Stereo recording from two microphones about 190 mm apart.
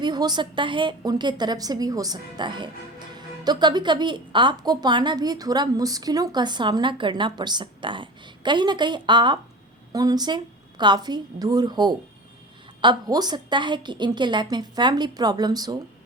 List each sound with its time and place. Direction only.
0.0 s a woman's voice: 20° right (ahead or behind)